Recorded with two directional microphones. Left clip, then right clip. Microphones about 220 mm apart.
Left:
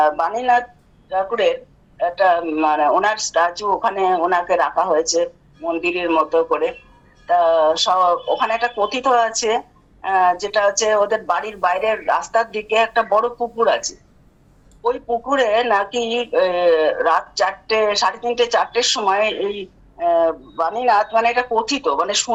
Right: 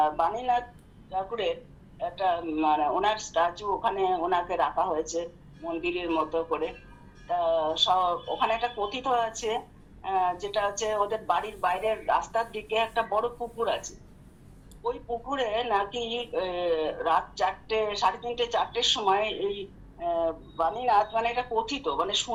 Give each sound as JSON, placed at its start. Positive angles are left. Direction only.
{"t": 0.0, "sound": "speech", "side_deg": 50}
{"t": 14.8, "sound": "speech", "side_deg": 50}